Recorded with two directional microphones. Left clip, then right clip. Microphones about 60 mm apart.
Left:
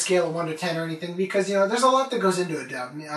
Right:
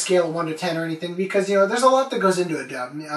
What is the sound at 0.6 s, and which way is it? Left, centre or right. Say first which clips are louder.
Speech: right 3 dB; right.